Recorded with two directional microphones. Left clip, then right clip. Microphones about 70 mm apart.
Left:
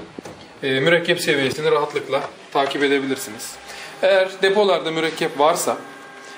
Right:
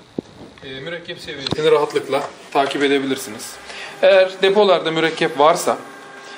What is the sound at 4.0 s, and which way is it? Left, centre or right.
A man's voice, right.